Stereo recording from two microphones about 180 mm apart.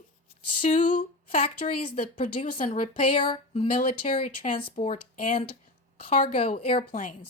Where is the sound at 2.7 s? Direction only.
30° left (ahead or behind).